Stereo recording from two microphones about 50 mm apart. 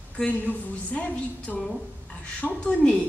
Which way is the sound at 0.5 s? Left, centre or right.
Left.